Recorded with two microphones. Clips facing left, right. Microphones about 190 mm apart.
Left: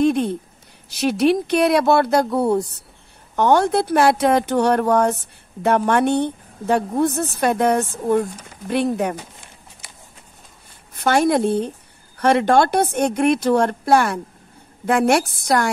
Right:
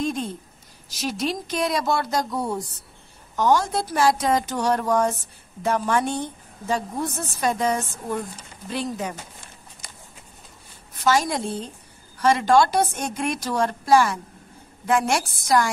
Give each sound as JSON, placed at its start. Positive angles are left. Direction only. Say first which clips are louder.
{"t": 0.0, "sound": "a sound", "louder": "left 9 dB", "side_deg": 65}
{"t": 0.8, "sound": "a woman's voice", "louder": "left 10 dB", "side_deg": 60}
{"t": 11.0, "sound": "a woman's voice", "louder": "left 5 dB", "side_deg": 60}